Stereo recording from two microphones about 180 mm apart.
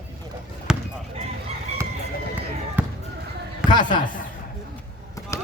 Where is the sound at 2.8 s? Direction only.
10° right (ahead or behind).